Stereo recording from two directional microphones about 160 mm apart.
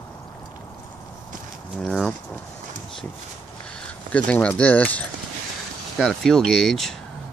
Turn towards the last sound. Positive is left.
turn(degrees=0)  # may be behind; listen again after turning